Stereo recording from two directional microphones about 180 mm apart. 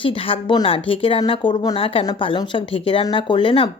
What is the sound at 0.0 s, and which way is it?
Speech, 30° left (ahead or behind).